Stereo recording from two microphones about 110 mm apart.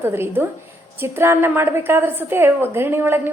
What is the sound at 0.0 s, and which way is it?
A woman's voice, 20° right (ahead or behind).